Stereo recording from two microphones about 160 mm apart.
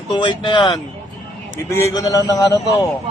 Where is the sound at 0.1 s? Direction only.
30° left (ahead or behind).